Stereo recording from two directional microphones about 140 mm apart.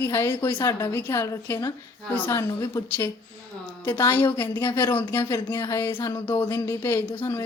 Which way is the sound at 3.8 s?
20° left (ahead or behind).